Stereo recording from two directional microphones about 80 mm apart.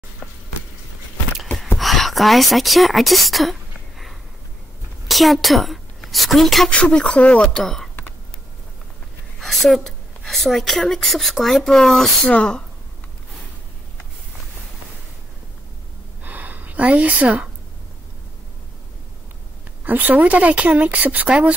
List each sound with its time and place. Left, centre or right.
1.8 s speech: centre
5.0 s a woman's voice: centre
6.7 s speech: centre
7.6 s speech: centre
9.4 s a woman's voice: centre
12.3 s speech: centre
16.2 s a sound: right
19.8 s speech: right